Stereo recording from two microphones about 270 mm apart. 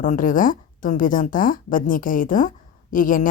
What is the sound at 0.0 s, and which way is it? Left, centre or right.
A woman's voice, left.